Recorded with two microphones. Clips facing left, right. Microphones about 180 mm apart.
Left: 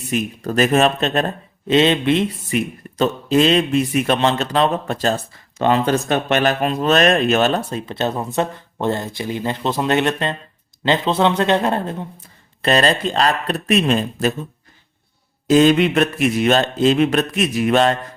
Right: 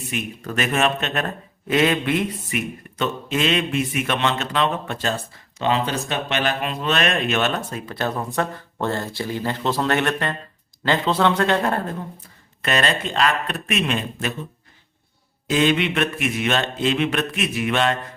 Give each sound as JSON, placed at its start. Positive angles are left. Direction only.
{"t": 0.1, "sound": "speech", "side_deg": 35}
{"t": 12.6, "sound": "speech", "side_deg": 35}
{"t": 15.4, "sound": "speech", "side_deg": 40}